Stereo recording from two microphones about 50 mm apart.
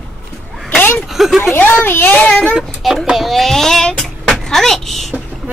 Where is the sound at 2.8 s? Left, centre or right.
Centre.